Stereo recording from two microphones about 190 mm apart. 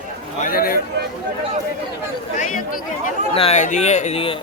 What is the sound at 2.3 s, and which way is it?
Speech, 45° left (ahead or behind).